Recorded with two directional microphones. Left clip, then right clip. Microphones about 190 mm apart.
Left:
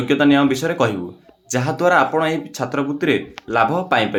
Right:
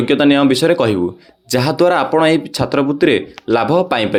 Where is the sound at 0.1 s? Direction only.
35° right (ahead or behind).